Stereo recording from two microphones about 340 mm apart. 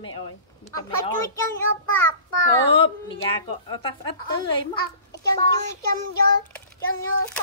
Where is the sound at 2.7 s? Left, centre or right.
Centre.